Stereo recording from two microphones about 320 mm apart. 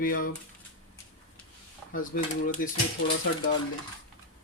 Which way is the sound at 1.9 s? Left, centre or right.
Left.